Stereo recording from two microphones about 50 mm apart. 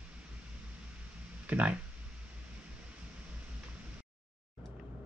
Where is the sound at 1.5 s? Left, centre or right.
Right.